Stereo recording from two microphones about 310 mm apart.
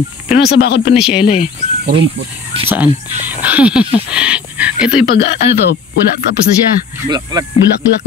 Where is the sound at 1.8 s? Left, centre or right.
Right.